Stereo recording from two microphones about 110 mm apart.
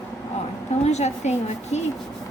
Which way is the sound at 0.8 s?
90° left.